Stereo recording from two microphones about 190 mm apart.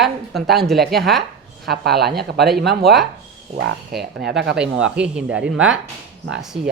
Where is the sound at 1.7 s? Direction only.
55° right (ahead or behind).